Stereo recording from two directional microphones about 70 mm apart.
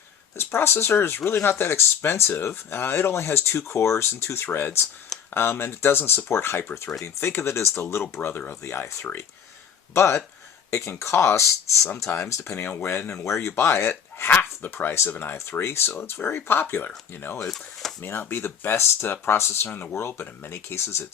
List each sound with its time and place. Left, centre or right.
0.3 s speech: left
13.0 s speech: centre
13.2 s speech: left